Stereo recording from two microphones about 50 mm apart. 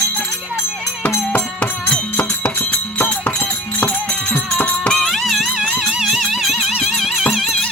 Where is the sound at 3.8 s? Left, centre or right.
Left.